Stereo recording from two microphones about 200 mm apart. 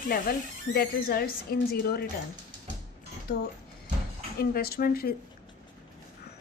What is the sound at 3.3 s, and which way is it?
Speech, 55° left (ahead or behind).